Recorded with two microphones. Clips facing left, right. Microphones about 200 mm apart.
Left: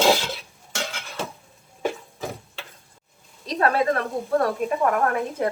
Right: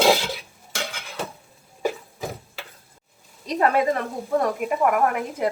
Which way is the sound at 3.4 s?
15° right (ahead or behind).